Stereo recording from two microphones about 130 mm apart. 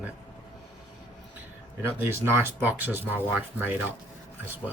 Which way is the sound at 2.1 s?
15° right (ahead or behind).